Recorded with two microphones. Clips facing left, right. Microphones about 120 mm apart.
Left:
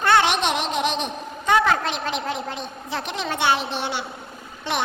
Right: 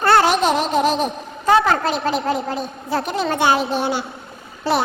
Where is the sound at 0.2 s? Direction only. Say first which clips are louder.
Right 5 dB; 40° right (ahead or behind).